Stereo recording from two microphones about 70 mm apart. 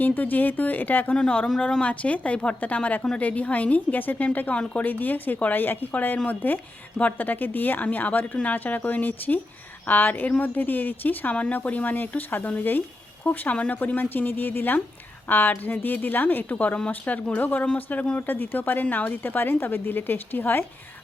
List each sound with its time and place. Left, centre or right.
0.0 s a woman's voice: left
1.1 s a woman's voice: centre; by 20.7 s left